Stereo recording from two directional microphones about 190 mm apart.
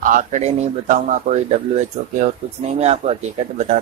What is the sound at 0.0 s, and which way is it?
Speech, 45° right (ahead or behind).